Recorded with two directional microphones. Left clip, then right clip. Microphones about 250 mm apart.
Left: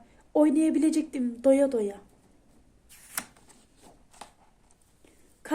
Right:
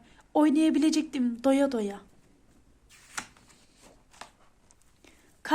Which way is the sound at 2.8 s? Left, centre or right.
Centre.